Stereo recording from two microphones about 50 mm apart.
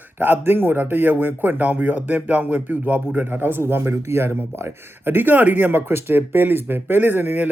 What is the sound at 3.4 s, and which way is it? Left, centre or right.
Speech, right.